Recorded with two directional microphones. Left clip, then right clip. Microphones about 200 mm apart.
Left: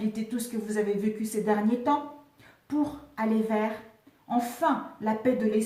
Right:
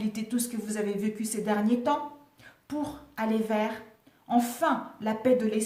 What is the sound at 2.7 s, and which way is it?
A woman's voice, 45° right (ahead or behind).